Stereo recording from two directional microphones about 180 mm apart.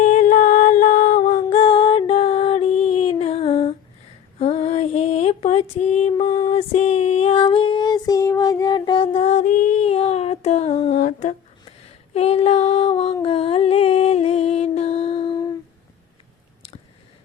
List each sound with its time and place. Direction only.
0.0 s music: 45° left (ahead or behind)
1.3 s a sound: 35° left (ahead or behind)
4.4 s female singing: 35° left (ahead or behind)
10.9 s humming: 45° left (ahead or behind)
12.1 s female singing: 35° left (ahead or behind)
13.2 s music: 30° left (ahead or behind)